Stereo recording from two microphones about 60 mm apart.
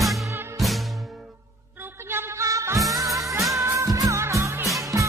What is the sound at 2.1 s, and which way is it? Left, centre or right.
Music, right.